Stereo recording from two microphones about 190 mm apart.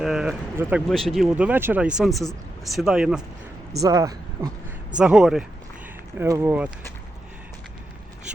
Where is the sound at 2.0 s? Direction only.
Centre (ahead or behind).